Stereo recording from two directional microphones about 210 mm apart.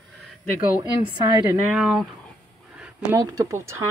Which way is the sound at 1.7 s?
5° right (ahead or behind).